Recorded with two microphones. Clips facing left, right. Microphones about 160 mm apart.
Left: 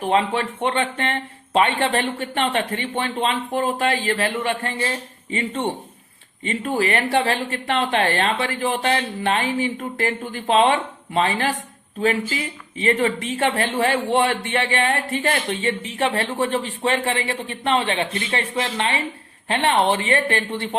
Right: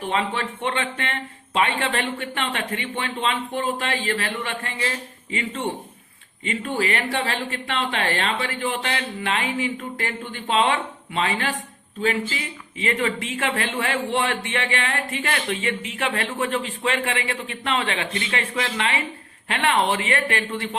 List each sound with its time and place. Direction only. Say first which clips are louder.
0.0 s speech: left 5 dB; 40° left (ahead or behind)